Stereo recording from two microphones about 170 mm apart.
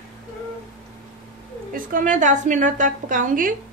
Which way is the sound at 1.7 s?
50° right (ahead or behind).